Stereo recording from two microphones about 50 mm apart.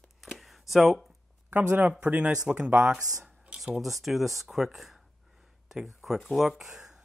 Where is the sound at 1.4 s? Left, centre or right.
Right.